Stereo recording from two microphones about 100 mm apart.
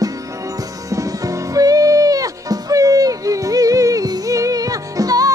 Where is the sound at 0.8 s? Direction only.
35° right (ahead or behind).